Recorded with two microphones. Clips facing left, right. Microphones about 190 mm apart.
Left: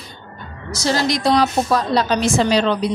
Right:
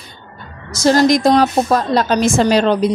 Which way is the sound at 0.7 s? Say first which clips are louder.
Right 8 dB; 45° right (ahead or behind).